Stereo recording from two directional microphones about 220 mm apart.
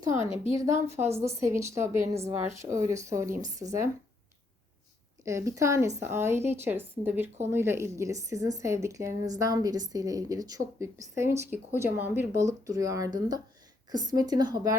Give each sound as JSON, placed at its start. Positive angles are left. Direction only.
{"t": 0.2, "sound": "a woman's voice", "side_deg": 25}
{"t": 1.1, "sound": "a woman's voice", "side_deg": -15}
{"t": 5.2, "sound": "a woman's voice", "side_deg": -15}